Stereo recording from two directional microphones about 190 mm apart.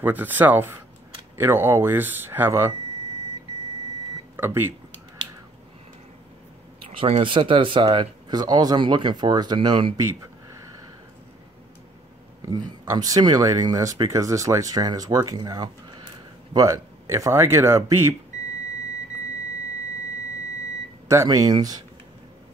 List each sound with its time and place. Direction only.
0.0 s speech: 10° right (ahead or behind)
4.4 s speech: 10° right (ahead or behind)
6.9 s speech: 30° right (ahead or behind)
12.4 s speech: 20° right (ahead or behind)
21.1 s speech: 15° right (ahead or behind)